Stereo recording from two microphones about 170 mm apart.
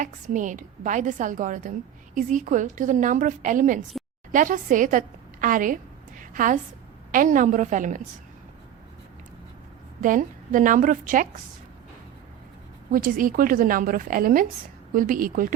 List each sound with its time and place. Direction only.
0.0 s a woman's voice: 50° right (ahead or behind)
10.0 s a woman's voice: 50° right (ahead or behind)
12.9 s a woman's voice: 55° right (ahead or behind)